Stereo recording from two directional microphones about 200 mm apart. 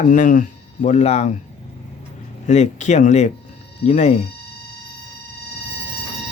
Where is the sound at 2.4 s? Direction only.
35° left (ahead or behind).